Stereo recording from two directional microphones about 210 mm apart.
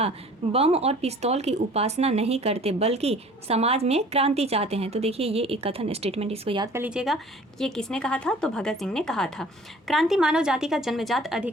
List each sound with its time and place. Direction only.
0.5 s speech: 30° right (ahead or behind)
6.7 s a woman's voice: 5° right (ahead or behind)